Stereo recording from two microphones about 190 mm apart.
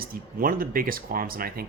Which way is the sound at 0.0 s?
50° right (ahead or behind).